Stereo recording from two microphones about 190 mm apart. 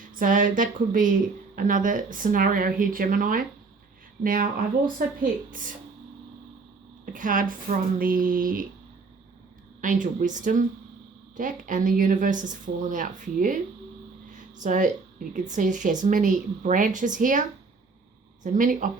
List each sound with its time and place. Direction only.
0.2 s a woman's voice: 45° right (ahead or behind)
5.5 s a woman's voice: 45° right (ahead or behind)
7.0 s a woman's voice: 45° right (ahead or behind)
9.8 s a woman's voice: 45° right (ahead or behind)
14.3 s a sound: 40° right (ahead or behind)
15.3 s a woman's voice: 40° right (ahead or behind)
18.4 s a woman's voice: 45° right (ahead or behind)